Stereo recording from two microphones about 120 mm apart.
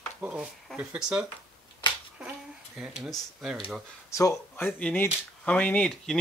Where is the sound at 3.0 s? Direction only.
Centre (ahead or behind).